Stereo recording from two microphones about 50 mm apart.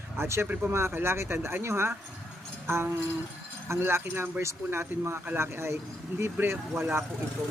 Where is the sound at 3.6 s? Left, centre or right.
Right.